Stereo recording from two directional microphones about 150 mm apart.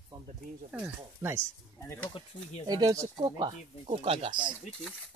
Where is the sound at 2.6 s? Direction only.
25° right (ahead or behind).